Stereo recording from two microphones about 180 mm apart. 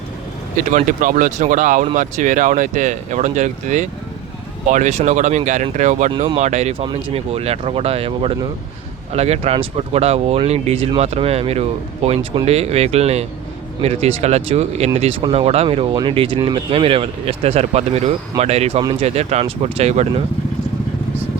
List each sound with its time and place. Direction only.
0.5 s speech: 45° right (ahead or behind)